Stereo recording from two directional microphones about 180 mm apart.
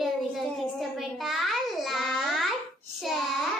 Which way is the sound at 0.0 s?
Centre (ahead or behind).